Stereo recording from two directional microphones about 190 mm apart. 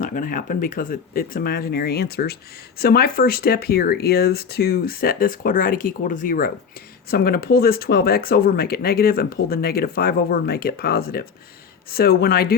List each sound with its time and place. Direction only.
0.0 s speech: 45° left (ahead or behind)